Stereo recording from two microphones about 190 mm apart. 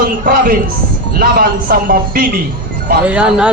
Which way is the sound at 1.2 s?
50° right (ahead or behind).